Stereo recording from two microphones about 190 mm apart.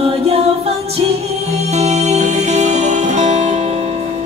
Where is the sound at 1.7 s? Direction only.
35° right (ahead or behind).